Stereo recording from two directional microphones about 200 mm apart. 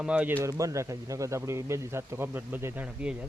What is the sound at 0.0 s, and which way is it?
Speech, 5° right (ahead or behind).